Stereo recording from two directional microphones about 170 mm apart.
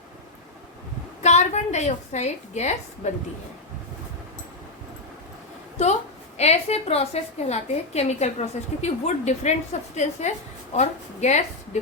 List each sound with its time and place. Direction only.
1.2 s a woman's voice: 40° left (ahead or behind)
5.8 s a woman's voice: 40° left (ahead or behind)